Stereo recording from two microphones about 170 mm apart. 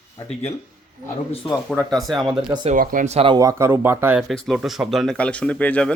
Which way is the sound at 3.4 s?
15° right (ahead or behind).